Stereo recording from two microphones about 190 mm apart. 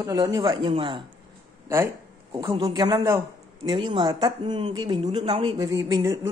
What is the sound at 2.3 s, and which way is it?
Speech, 20° right (ahead or behind).